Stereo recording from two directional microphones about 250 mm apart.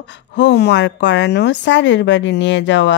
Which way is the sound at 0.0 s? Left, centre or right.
Left.